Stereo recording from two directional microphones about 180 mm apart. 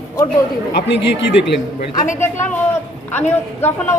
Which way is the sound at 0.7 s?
70° left (ahead or behind).